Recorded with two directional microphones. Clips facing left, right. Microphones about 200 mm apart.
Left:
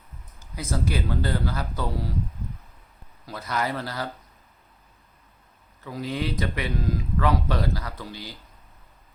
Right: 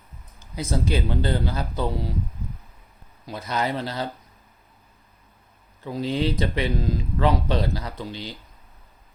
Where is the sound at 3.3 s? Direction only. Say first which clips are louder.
Right 2 dB; 25° right (ahead or behind).